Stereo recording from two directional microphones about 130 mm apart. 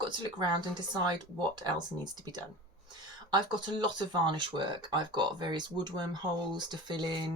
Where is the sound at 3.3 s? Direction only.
35° right (ahead or behind).